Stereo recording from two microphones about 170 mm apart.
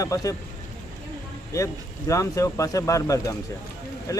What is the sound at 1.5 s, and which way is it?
Speech, 20° left (ahead or behind).